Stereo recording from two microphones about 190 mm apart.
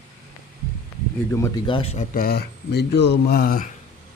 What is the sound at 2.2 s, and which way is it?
Speech, 55° left (ahead or behind).